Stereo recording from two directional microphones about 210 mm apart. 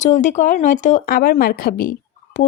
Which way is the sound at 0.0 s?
35° left (ahead or behind).